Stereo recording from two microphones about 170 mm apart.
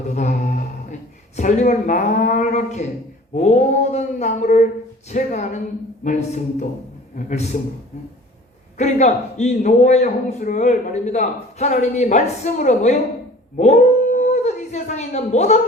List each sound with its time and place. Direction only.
0.1 s a sound: 45° left (ahead or behind)
1.4 s a man's voice: 45° left (ahead or behind)
8.8 s a man's voice: 45° left (ahead or behind)
13.6 s dog: 45° left (ahead or behind)